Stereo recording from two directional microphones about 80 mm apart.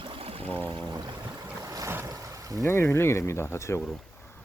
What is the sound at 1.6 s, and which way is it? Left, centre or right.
Boat, right.